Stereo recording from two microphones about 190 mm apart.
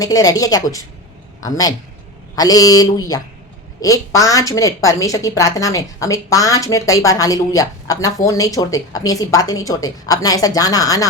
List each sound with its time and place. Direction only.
0.0 s a woman's voice: 20° left (ahead or behind)